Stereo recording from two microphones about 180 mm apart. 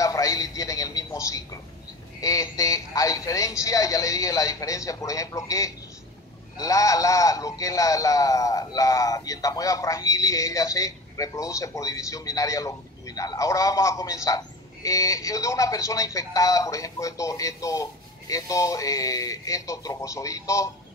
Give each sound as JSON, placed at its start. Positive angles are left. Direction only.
{"t": 0.0, "sound": "television", "side_deg": 20}
{"t": 2.2, "sound": "a woman's voice", "side_deg": 20}